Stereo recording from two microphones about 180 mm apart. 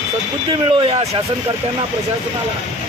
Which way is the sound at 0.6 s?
30° right (ahead or behind).